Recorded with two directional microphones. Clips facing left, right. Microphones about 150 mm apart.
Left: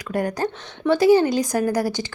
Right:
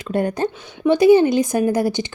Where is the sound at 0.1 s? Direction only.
25° right (ahead or behind).